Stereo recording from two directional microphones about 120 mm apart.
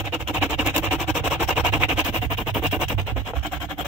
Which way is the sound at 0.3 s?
10° right (ahead or behind).